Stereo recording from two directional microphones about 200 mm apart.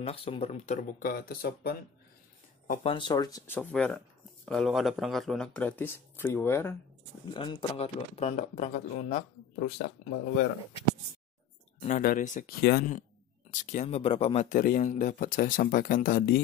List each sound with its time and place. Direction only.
0.0 s speech: 30° left (ahead or behind); by 1.8 s 50° left (ahead or behind)
2.8 s speech: 25° left (ahead or behind)
3.5 s speech: 5° left (ahead or behind)
7.3 s speech: 25° left (ahead or behind); by 10.4 s 45° left (ahead or behind)
11.8 s speech: 40° left (ahead or behind)